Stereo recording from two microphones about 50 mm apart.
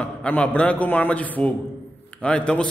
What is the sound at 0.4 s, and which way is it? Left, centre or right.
A man's voice, left.